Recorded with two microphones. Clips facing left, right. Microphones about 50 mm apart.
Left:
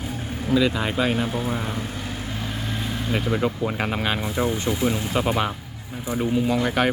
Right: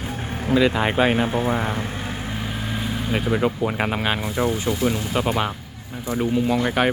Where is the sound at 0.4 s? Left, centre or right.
Right.